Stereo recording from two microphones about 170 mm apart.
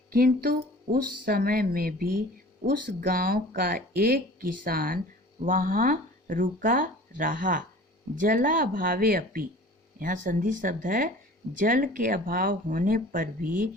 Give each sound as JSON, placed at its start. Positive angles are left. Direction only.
{"t": 0.1, "sound": "speech", "side_deg": -60}